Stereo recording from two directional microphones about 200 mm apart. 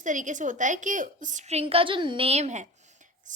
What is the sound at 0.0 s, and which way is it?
A child's voice, 40° right (ahead or behind).